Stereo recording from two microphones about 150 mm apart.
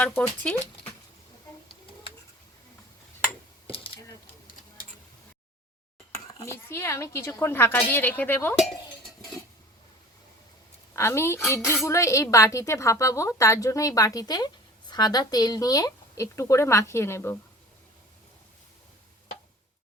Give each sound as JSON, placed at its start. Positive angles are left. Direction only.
{"t": 6.1, "sound": "speech", "side_deg": 20}
{"t": 10.9, "sound": "speech", "side_deg": 15}